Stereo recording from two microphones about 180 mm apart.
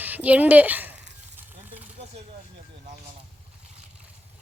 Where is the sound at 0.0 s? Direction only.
10° right (ahead or behind).